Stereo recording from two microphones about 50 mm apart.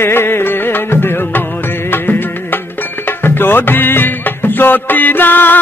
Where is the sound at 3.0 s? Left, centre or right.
Left.